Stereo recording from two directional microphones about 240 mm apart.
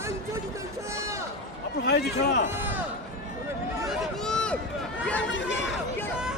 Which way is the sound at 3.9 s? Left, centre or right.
Centre.